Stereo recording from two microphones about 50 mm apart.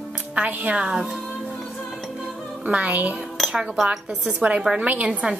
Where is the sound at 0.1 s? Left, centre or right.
Right.